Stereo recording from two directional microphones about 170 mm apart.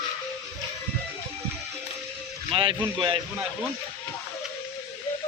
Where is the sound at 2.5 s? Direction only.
35° right (ahead or behind).